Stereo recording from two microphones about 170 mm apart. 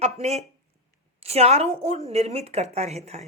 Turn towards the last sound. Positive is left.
turn(degrees=-40)  # may be behind; listen again after turning